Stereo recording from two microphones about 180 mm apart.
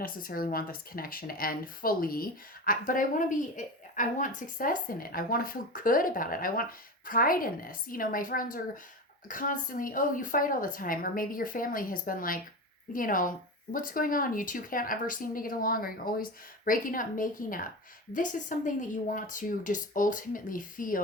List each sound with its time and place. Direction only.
0.0 s speech: 50° left (ahead or behind)